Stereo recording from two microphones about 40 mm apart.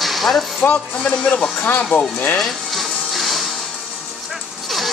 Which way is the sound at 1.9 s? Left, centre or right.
Left.